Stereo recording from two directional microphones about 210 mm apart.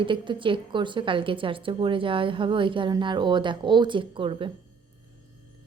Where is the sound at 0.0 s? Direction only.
25° right (ahead or behind).